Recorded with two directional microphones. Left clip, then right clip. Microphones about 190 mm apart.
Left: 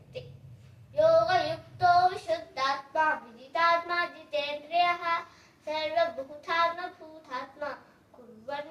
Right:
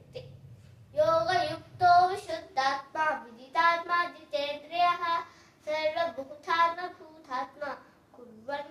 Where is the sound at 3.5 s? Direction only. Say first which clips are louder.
Even; 20° right (ahead or behind).